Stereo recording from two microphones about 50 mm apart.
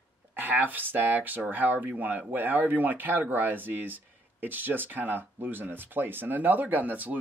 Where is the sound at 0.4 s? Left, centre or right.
Right.